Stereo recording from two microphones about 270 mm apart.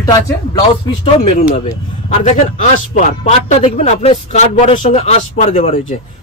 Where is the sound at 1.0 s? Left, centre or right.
Left.